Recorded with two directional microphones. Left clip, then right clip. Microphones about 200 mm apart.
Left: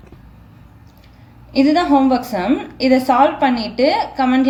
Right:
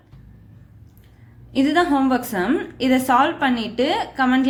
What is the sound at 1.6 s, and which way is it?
A woman's voice, 25° right (ahead or behind).